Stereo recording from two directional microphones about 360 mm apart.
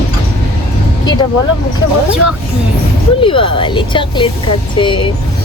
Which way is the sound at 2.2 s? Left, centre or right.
Right.